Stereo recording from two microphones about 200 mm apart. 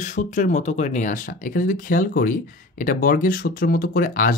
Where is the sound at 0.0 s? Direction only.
40° left (ahead or behind).